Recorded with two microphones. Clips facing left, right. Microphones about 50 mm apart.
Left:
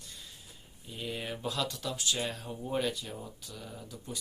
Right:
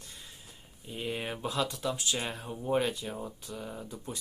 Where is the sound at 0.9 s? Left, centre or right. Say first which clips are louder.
Right 3 dB; right.